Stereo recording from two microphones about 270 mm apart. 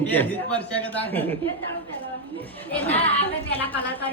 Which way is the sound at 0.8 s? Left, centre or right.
Centre.